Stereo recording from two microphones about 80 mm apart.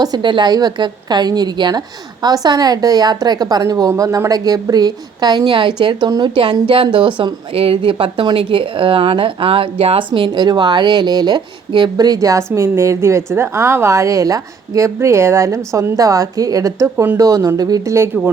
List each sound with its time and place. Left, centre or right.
0.2 s a woman's voice: right
6.1 s a woman's voice: right
6.3 s a woman's voice: right